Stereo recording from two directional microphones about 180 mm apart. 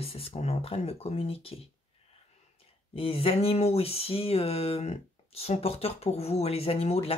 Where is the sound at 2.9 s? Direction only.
35° left (ahead or behind).